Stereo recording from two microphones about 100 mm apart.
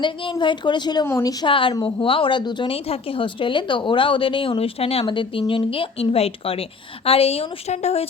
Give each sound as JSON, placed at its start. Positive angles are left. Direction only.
{"t": 0.0, "sound": "a woman's voice", "side_deg": 55}
{"t": 1.0, "sound": "a woman's voice", "side_deg": 35}
{"t": 1.5, "sound": "speech", "side_deg": 60}
{"t": 2.7, "sound": "a woman's voice", "side_deg": 75}